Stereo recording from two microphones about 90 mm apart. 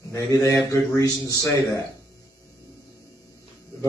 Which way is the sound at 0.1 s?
35° left (ahead or behind).